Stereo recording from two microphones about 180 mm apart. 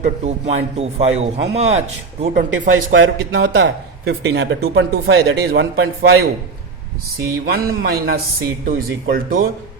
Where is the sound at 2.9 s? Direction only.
90° right.